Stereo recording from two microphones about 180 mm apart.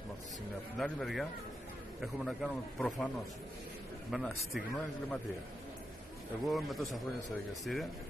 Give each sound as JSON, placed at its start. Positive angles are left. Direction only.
{"t": 0.7, "sound": "a man's voice", "side_deg": 5}
{"t": 4.1, "sound": "a man's voice", "side_deg": 0}
{"t": 6.4, "sound": "a man's voice", "side_deg": 0}